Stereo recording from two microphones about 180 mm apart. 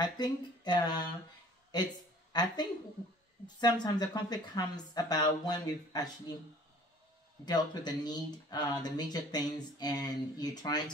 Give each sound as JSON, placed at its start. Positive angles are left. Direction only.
{"t": 0.0, "sound": "a woman's voice", "side_deg": 25}
{"t": 2.3, "sound": "a woman's voice", "side_deg": 25}
{"t": 7.4, "sound": "a woman's voice", "side_deg": 25}